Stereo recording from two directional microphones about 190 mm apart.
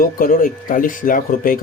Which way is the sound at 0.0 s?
45° left (ahead or behind).